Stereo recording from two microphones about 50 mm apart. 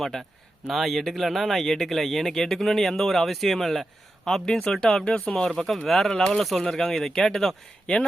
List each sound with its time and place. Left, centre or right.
0.0 s speech: centre